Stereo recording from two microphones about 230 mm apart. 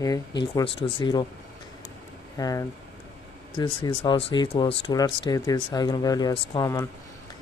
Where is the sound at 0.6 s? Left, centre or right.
Left.